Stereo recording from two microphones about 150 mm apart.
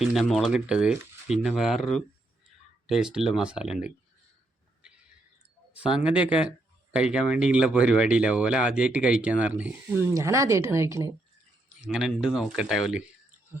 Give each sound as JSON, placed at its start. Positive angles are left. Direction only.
{"t": 0.0, "sound": "speech", "side_deg": 0}
{"t": 6.1, "sound": "speech", "side_deg": -5}
{"t": 10.1, "sound": "speech", "side_deg": -20}
{"t": 11.8, "sound": "speech", "side_deg": -5}